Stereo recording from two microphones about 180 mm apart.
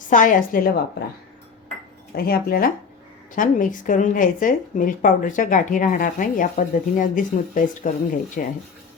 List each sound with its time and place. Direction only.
0.1 s a woman's voice: 45° left (ahead or behind)
2.1 s a woman's voice: 55° left (ahead or behind)